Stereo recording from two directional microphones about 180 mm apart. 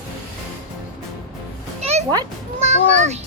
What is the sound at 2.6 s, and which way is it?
Speech, 40° right (ahead or behind).